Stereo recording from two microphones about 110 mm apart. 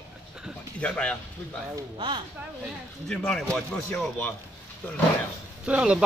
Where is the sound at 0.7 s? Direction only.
10° left (ahead or behind).